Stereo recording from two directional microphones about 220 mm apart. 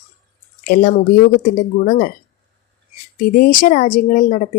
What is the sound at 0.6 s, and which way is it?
Speech, 40° left (ahead or behind).